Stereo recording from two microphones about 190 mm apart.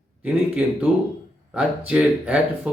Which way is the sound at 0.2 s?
5° right (ahead or behind).